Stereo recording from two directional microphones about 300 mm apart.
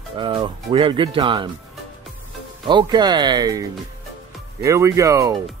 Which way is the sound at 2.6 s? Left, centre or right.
Centre.